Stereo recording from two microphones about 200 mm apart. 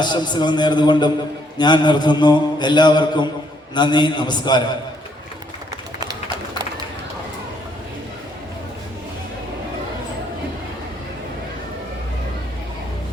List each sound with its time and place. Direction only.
0.0 s mantra: 20° left (ahead or behind)